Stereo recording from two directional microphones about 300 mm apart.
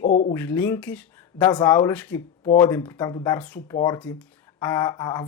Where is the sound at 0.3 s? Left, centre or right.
Centre.